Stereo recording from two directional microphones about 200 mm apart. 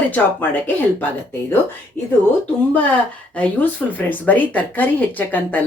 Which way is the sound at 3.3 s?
5° left (ahead or behind).